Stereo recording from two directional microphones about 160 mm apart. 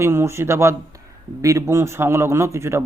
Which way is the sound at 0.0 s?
15° right (ahead or behind).